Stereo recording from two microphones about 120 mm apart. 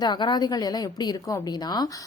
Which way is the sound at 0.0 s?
35° left (ahead or behind).